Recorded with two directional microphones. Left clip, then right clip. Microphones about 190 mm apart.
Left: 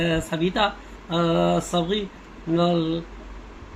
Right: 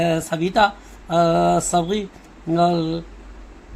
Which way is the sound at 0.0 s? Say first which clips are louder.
Right 3 dB; 50° right (ahead or behind).